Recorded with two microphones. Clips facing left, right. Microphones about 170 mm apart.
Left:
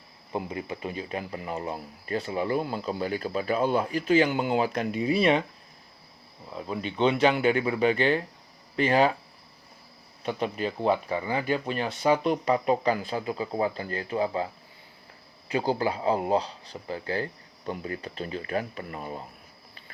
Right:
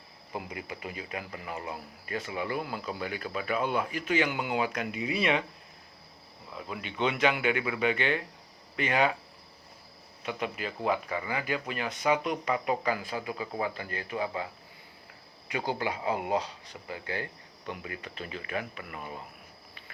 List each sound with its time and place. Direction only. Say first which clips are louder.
0.3 s speech: left 6 dB; 30° left (ahead or behind)
6.5 s speech: left 6 dB; 30° left (ahead or behind)
10.2 s speech: left 5 dB; 30° left (ahead or behind)
15.4 s speech: left 6 dB; 35° left (ahead or behind)